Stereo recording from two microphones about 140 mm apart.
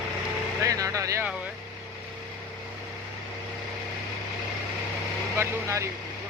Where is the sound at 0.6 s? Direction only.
25° right (ahead or behind).